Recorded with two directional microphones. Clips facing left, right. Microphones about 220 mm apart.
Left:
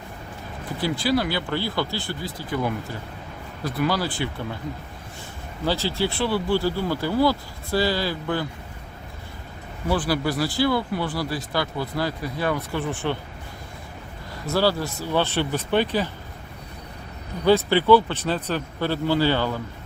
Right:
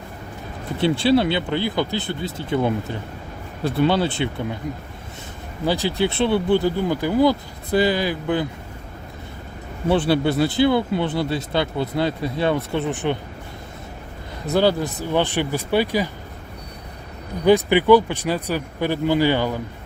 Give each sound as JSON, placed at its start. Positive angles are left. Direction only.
{"t": 0.8, "sound": "speech", "side_deg": -25}
{"t": 5.6, "sound": "speech", "side_deg": -15}
{"t": 9.9, "sound": "speech", "side_deg": -25}
{"t": 14.4, "sound": "speech", "side_deg": -20}
{"t": 17.4, "sound": "speech", "side_deg": -15}